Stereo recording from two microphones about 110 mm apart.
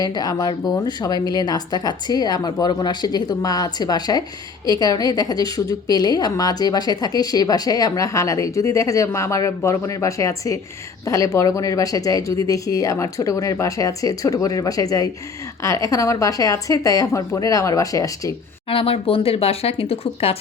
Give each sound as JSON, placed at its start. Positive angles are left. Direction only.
{"t": 0.0, "sound": "a woman's voice", "side_deg": 35}
{"t": 18.7, "sound": "speech", "side_deg": 55}